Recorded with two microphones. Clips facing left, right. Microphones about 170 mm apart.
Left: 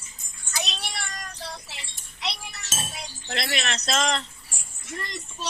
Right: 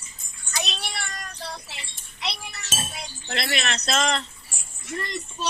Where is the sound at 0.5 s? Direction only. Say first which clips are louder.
Right 1 dB; 60° right (ahead or behind).